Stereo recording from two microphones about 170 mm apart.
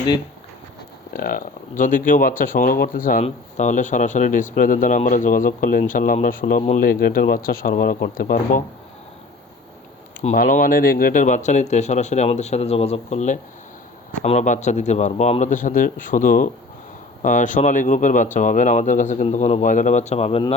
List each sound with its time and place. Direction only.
1.1 s speech: 55° left (ahead or behind)
10.3 s speech: 55° left (ahead or behind); by 20.4 s 35° left (ahead or behind)